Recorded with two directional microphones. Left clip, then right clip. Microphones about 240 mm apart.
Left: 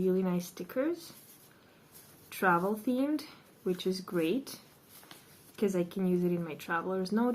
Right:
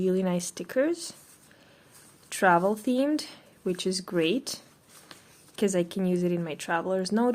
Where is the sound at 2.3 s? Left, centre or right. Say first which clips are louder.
Right 6 dB; right.